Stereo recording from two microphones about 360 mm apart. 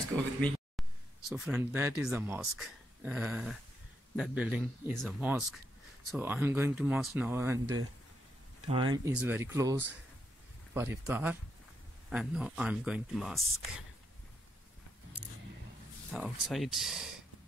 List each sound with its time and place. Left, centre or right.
0.4 s speech: centre
0.8 s a sound: centre
1.3 s speech: centre
16.1 s speech: centre